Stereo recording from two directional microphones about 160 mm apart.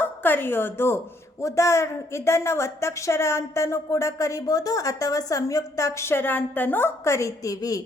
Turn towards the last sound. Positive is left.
turn(degrees=20)  # may be behind; listen again after turning